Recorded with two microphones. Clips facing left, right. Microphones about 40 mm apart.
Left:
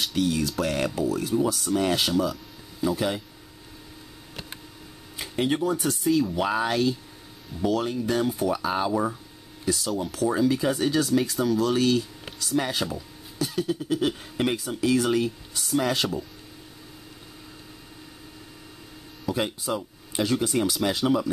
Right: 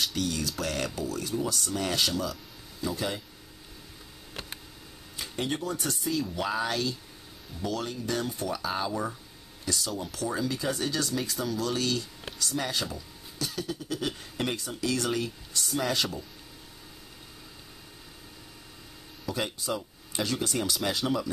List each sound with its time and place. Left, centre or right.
0.1 s speech: centre
5.1 s speech: centre
6.3 s speech: centre
9.7 s speech: centre
11.7 s speech: centre
19.3 s speech: centre